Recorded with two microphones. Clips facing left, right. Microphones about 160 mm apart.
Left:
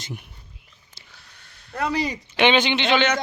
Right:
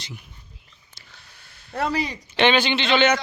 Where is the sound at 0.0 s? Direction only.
55° left (ahead or behind).